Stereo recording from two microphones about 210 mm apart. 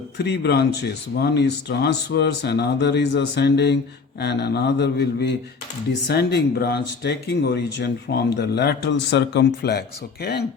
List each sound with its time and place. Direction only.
0.2 s speech: 50° left (ahead or behind)